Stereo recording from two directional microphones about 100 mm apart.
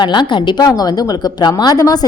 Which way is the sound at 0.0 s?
50° left (ahead or behind).